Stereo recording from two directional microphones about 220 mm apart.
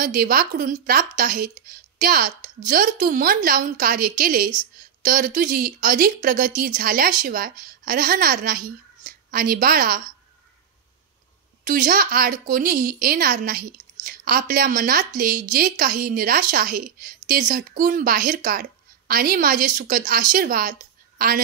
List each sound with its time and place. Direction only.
0.0 s a woman's voice: 40° right (ahead or behind)
11.6 s a woman's voice: 40° right (ahead or behind)